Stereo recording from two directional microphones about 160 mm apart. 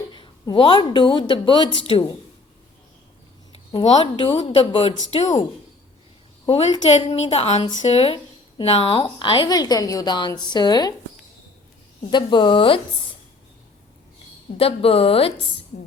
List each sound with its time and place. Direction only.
0.1 s speech: 30° left (ahead or behind)
3.8 s speech: 35° left (ahead or behind)
6.5 s speech: 45° left (ahead or behind)
7.6 s a woman's voice: 25° left (ahead or behind)
7.9 s a woman's voice: 35° left (ahead or behind)
12.1 s speech: 30° left (ahead or behind)
14.6 s speech: 35° left (ahead or behind)
15.7 s speech: 55° left (ahead or behind)